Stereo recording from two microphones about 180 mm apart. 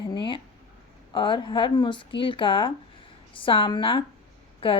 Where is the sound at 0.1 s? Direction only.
25° left (ahead or behind).